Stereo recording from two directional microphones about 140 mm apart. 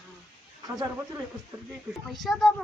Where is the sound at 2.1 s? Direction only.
Centre (ahead or behind).